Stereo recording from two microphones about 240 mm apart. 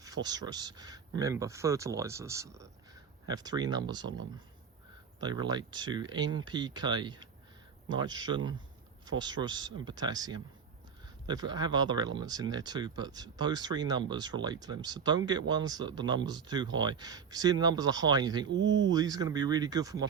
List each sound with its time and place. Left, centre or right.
0.0 s speech: centre
4.0 s speech: right
5.2 s speech: centre
18.4 s speech: right
18.9 s speech: centre